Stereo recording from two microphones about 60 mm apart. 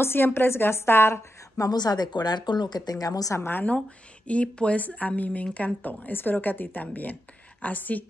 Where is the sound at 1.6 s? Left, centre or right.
Left.